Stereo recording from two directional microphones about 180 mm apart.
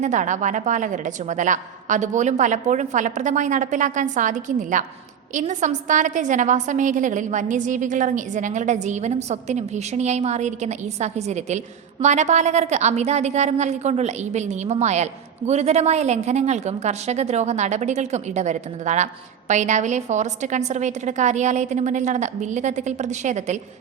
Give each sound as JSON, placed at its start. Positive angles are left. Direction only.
{"t": 0.0, "sound": "a woman's voice", "side_deg": -45}